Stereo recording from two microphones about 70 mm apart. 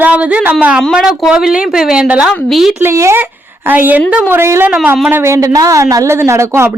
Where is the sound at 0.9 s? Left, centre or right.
Centre.